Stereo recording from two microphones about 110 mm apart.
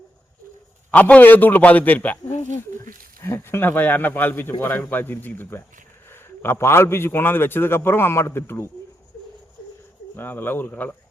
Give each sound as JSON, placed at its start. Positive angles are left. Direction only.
{"t": 0.9, "sound": "speech", "side_deg": 15}
{"t": 2.3, "sound": "a sound", "side_deg": 90}
{"t": 3.2, "sound": "a man's voice", "side_deg": 20}
{"t": 10.2, "sound": "a man's voice", "side_deg": 20}